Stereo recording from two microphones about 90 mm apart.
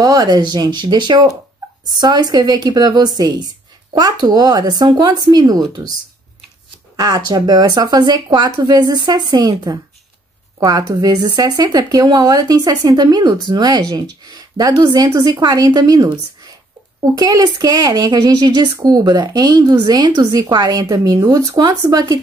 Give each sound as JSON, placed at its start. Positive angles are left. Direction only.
{"t": 0.0, "sound": "speech", "side_deg": -45}
{"t": 7.0, "sound": "speech", "side_deg": -45}